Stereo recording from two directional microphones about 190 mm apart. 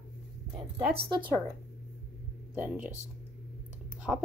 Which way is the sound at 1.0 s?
25° right (ahead or behind).